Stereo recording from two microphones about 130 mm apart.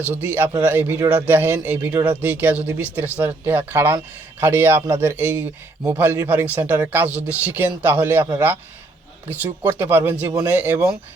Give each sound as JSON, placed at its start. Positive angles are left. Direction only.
{"t": 0.1, "sound": "a man's voice", "side_deg": -15}
{"t": 9.3, "sound": "a man's voice", "side_deg": -15}